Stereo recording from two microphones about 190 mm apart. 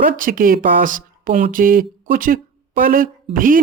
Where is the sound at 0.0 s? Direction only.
45° right (ahead or behind).